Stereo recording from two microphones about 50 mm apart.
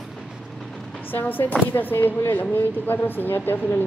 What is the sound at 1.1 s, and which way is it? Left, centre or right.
A woman's voice, left.